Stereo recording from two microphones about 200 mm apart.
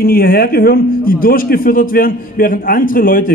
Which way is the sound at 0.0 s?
50° left (ahead or behind).